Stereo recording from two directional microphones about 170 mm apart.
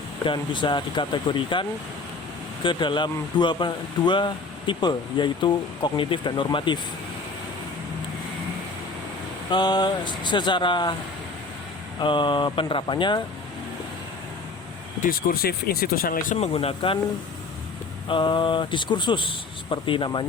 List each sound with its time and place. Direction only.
0.3 s speech: 30° left (ahead or behind)
2.6 s speech: 25° left (ahead or behind)
9.5 s speech: 25° left (ahead or behind)
11.9 s speech: 30° left (ahead or behind)
15.0 s speech: 60° left (ahead or behind)
16.4 s speech: 35° left (ahead or behind)
18.1 s speech: 30° left (ahead or behind)